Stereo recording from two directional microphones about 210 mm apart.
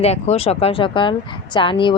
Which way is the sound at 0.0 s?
30° left (ahead or behind).